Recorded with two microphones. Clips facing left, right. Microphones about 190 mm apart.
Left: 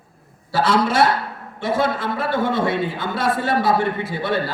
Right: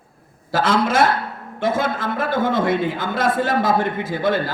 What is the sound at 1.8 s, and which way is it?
A man's voice, 90° right.